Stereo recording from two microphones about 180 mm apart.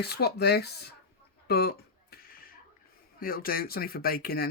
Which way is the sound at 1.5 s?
60° left (ahead or behind).